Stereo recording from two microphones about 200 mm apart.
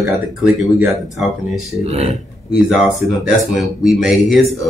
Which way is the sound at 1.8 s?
30° right (ahead or behind).